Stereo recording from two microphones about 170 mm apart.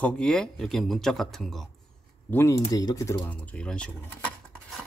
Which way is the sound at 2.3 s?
15° left (ahead or behind).